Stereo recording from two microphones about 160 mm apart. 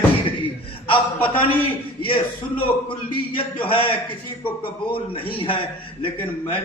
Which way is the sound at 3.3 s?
35° left (ahead or behind).